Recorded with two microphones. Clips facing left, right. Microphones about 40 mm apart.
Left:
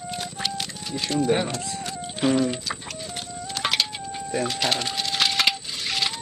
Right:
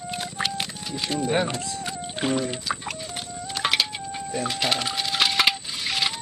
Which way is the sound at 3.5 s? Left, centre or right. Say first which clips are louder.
Right 1 dB; centre.